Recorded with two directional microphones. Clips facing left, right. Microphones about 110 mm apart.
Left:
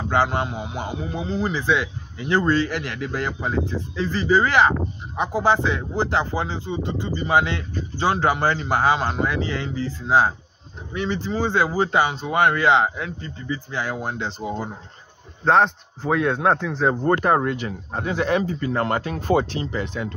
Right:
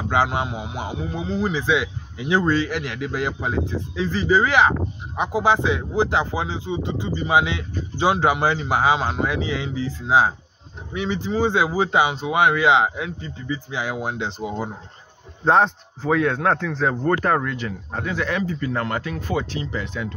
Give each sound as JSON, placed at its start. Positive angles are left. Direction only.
{"t": 0.1, "sound": "speech", "side_deg": -5}
{"t": 18.0, "sound": "speech", "side_deg": 30}
{"t": 19.2, "sound": "speech", "side_deg": 40}